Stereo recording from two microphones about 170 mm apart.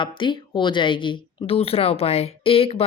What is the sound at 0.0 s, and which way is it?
Speech, 30° left (ahead or behind).